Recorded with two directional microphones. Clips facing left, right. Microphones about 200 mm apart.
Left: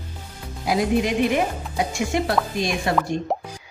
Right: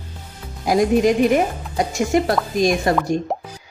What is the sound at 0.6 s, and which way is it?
A woman's voice, 45° right (ahead or behind).